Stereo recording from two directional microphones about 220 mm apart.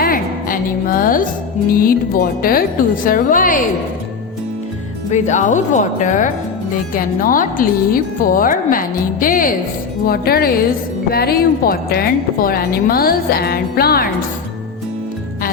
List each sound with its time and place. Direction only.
0.0 s music: 40° left (ahead or behind)
1.7 s speech: 40° left (ahead or behind)
5.1 s a woman's voice: 35° left (ahead or behind)